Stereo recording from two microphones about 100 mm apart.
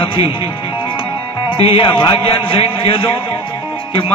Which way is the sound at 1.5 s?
65° left (ahead or behind).